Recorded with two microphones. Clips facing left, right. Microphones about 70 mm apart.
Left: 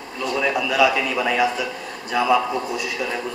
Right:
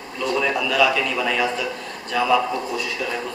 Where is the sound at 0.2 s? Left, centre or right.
Centre.